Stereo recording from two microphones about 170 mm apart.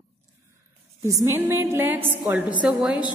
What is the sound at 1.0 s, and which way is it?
A woman's voice, 15° right (ahead or behind).